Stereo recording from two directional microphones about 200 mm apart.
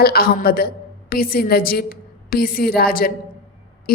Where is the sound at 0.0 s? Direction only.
50° left (ahead or behind).